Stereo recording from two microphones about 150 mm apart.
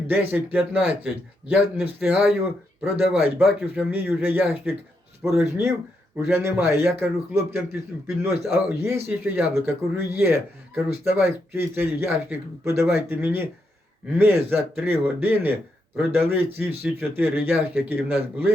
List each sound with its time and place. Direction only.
0.1 s speech: 15° right (ahead or behind)
3.4 s speech: centre (ahead or behind)
3.9 s speech: 15° right (ahead or behind)
6.5 s speech: 15° right (ahead or behind)